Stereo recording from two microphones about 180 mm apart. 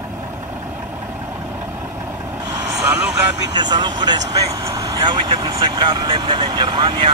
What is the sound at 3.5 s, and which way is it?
Speech, 25° right (ahead or behind).